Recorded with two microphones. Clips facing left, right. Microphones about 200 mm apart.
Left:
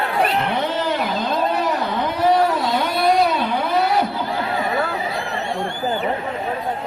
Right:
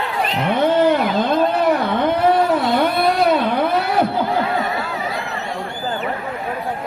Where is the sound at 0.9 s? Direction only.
55° right (ahead or behind).